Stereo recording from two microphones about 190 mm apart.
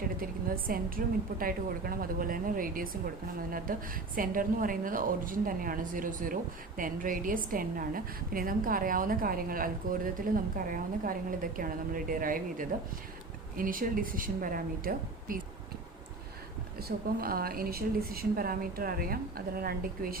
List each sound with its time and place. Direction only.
0.2 s a woman's voice: 50° right (ahead or behind)
17.2 s a woman's voice: 50° right (ahead or behind)